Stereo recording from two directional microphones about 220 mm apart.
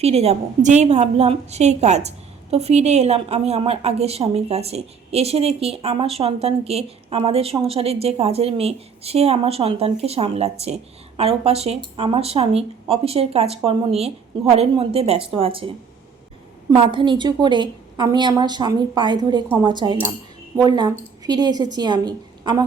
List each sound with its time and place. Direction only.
0.0 s a woman's voice: 30° right (ahead or behind)